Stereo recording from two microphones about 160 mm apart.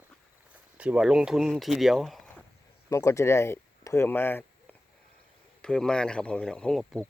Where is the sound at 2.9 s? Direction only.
20° left (ahead or behind).